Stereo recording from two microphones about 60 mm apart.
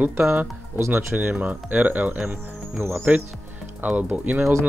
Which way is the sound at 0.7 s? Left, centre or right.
Right.